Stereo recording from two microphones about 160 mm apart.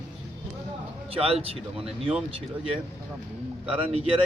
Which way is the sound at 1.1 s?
35° right (ahead or behind).